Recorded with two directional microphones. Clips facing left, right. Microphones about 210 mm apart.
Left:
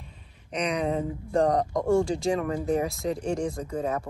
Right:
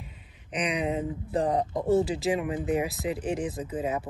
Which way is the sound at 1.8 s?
5° right (ahead or behind).